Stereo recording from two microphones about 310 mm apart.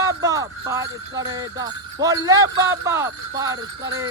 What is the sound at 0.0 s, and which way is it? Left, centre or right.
Music, centre.